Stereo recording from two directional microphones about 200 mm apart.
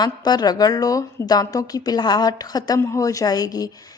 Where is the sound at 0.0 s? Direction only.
20° left (ahead or behind).